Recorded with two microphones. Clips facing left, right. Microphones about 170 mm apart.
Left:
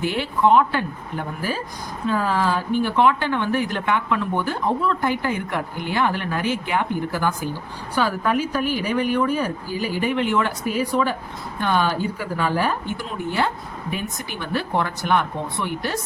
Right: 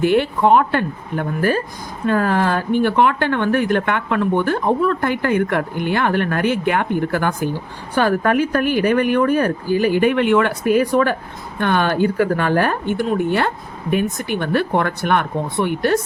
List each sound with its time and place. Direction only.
0.0 s speech: 55° right (ahead or behind)